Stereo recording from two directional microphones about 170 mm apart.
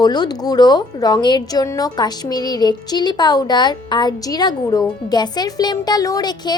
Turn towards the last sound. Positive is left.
turn(degrees=25)  # may be behind; listen again after turning